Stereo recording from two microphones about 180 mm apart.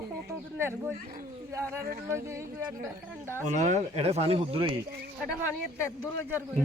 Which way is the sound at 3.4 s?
40° right (ahead or behind).